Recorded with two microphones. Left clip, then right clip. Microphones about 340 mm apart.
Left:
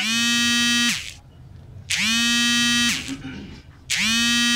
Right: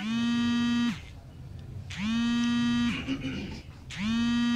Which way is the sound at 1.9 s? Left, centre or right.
Left.